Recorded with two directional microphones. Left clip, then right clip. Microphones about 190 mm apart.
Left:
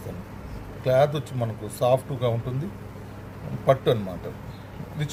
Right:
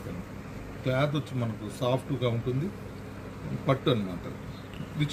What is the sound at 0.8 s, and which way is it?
Speech, 80° left.